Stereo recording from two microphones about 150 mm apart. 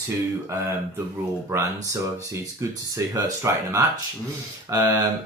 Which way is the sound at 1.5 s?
20° right (ahead or behind).